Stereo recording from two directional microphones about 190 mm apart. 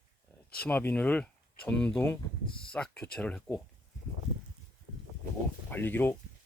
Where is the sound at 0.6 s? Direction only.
10° left (ahead or behind).